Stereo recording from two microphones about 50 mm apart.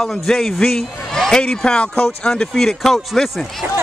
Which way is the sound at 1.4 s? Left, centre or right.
Left.